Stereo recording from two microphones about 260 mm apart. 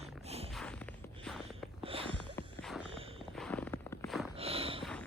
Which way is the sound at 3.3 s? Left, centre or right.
Centre.